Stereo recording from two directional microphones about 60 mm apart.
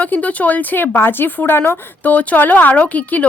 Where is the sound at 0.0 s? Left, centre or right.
Left.